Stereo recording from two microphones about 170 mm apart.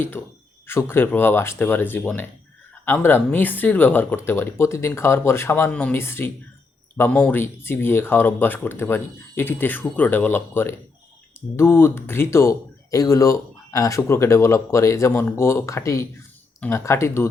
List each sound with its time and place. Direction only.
0.2 s speech: 10° left (ahead or behind)